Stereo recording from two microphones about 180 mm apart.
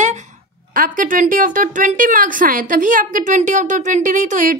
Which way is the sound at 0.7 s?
50° right (ahead or behind).